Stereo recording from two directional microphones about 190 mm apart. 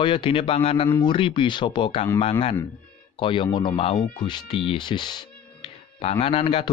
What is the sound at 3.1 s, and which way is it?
Speech, 25° left (ahead or behind).